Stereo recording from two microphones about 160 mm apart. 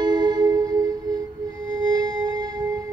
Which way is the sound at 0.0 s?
25° right (ahead or behind).